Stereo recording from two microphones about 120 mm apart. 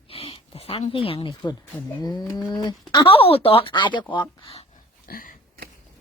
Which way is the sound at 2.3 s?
35° left (ahead or behind).